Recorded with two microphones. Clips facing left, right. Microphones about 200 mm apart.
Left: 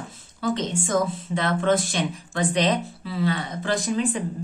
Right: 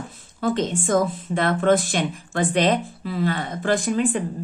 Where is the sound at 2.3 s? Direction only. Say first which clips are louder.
Right 3 dB; 55° right (ahead or behind).